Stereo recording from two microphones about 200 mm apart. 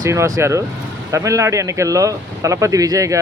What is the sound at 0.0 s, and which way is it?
Speech, 15° right (ahead or behind).